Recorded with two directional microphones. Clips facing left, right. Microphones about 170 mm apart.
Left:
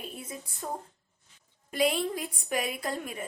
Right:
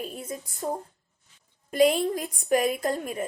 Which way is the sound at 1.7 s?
45° right (ahead or behind).